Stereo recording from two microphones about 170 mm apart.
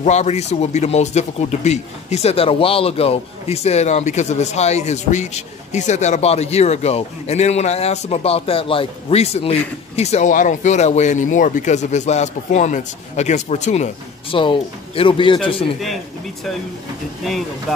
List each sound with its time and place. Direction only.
0.0 s speech: 40° left (ahead or behind)
14.3 s speech: 30° left (ahead or behind)
17.2 s speech: centre (ahead or behind)